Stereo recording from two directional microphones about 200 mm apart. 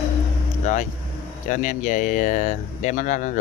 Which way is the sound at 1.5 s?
40° left (ahead or behind).